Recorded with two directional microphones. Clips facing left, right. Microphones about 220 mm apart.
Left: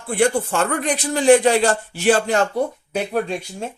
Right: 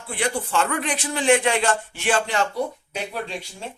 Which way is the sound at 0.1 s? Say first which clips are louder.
Left 7 dB; 50° left (ahead or behind).